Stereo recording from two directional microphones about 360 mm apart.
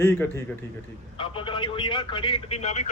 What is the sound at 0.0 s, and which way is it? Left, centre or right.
A man's voice, centre.